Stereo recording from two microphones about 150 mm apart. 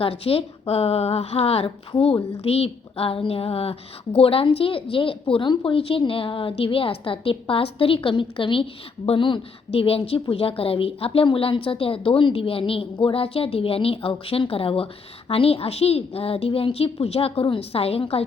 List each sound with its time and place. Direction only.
0.0 s a woman's voice: 40° left (ahead or behind)